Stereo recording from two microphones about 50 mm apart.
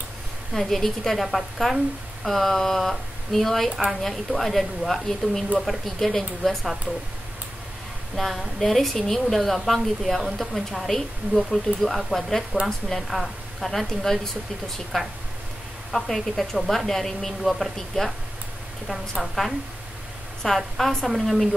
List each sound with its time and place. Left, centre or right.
0.5 s a woman's voice: centre
5.2 s speech: centre
5.6 s a woman's voice: centre
8.2 s a woman's voice: centre